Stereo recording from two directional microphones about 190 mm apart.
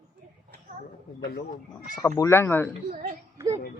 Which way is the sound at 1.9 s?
15° left (ahead or behind).